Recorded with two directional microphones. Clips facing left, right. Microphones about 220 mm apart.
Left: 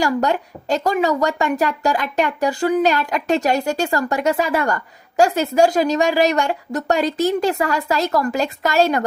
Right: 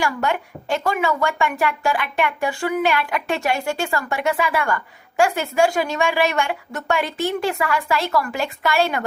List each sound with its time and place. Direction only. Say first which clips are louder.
0.0 s a woman's voice: left 4 dB; 40° left (ahead or behind)